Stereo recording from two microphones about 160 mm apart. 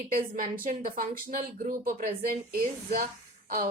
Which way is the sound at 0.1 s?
60° right (ahead or behind).